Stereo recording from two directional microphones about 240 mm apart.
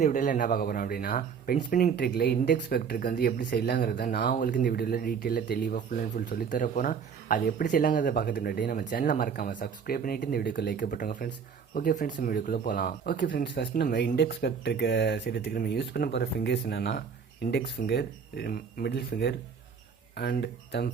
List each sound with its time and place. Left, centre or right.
0.0 s speech: left